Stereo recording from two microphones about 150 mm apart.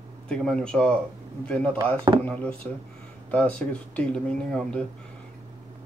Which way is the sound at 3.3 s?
10° left (ahead or behind).